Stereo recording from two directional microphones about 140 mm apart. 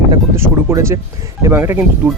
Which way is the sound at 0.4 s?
20° right (ahead or behind).